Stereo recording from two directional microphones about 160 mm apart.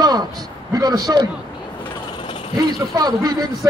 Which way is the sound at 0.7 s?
25° right (ahead or behind).